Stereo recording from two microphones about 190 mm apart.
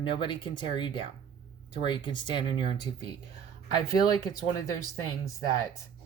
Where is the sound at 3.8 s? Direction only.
20° left (ahead or behind).